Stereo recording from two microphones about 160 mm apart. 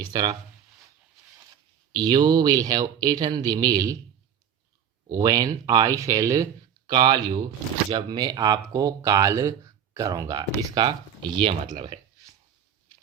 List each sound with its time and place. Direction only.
0.0 s speech: 25° right (ahead or behind)
1.9 s speech: 25° right (ahead or behind)
5.0 s speech: 20° right (ahead or behind)